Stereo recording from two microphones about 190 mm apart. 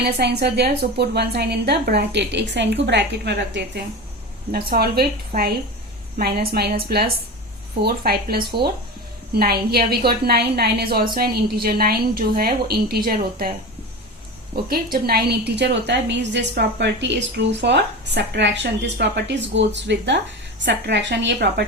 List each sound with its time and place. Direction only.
0.0 s a woman's voice: 60° right (ahead or behind)
4.7 s a woman's voice: 55° right (ahead or behind)
14.5 s a woman's voice: 55° right (ahead or behind)